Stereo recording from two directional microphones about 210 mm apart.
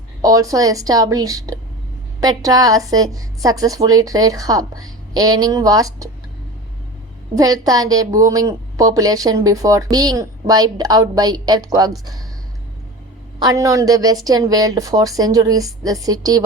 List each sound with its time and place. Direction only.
0.2 s a woman's voice: 15° right (ahead or behind)
7.3 s a woman's voice: 15° right (ahead or behind)
13.4 s a woman's voice: 15° right (ahead or behind)